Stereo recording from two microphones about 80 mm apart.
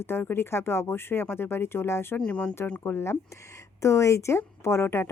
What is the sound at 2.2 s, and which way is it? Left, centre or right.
Speech, centre.